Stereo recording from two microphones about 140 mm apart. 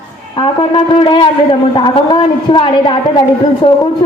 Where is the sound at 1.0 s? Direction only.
40° left (ahead or behind).